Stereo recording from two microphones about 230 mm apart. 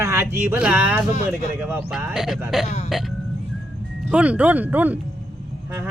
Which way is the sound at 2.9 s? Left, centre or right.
Centre.